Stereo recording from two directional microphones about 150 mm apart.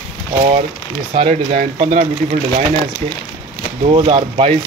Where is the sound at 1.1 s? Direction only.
45° right (ahead or behind).